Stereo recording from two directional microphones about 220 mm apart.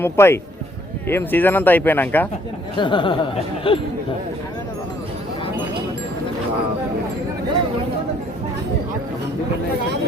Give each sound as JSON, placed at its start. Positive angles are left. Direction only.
{"t": 0.0, "sound": "speech", "side_deg": 10}
{"t": 2.7, "sound": "speech", "side_deg": 20}